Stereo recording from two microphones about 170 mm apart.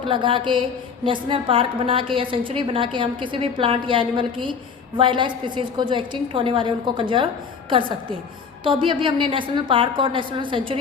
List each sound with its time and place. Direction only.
0.1 s a woman's voice: 30° right (ahead or behind)